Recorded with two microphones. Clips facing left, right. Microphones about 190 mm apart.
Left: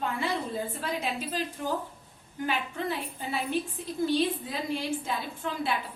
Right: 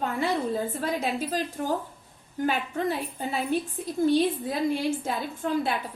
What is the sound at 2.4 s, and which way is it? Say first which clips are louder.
A woman's voice: right 4 dB; 40° right (ahead or behind).